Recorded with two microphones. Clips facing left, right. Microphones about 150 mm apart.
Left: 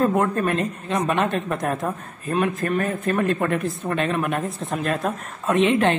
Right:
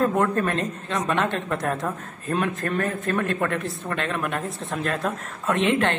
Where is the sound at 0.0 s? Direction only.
20° left (ahead or behind).